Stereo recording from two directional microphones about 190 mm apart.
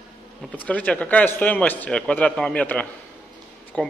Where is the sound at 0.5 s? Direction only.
5° left (ahead or behind).